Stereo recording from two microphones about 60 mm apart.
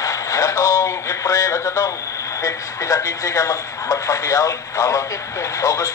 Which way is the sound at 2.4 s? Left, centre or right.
Left.